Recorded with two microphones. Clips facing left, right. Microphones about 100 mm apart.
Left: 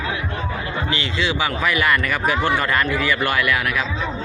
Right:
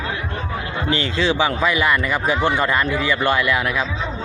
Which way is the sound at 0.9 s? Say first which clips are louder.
Right 5 dB; 35° right (ahead or behind).